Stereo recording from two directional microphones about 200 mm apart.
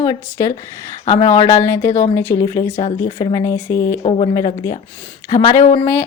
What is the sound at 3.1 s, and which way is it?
Speech, 20° left (ahead or behind).